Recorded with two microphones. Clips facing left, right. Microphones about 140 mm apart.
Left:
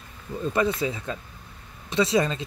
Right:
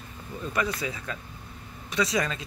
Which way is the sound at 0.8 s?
25° left (ahead or behind).